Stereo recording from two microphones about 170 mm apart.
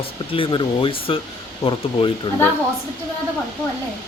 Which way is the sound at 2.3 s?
30° left (ahead or behind).